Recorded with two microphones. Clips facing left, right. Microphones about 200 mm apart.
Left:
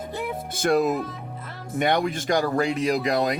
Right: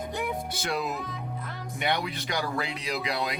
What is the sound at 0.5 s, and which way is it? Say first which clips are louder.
Speech: left 10 dB; 50° left (ahead or behind).